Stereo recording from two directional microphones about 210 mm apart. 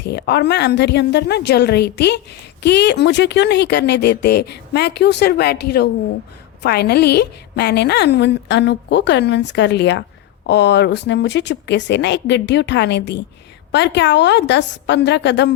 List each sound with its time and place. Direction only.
0.0 s a woman's voice: 55° left (ahead or behind)